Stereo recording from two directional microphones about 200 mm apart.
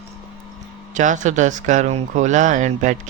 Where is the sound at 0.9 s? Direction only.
40° right (ahead or behind).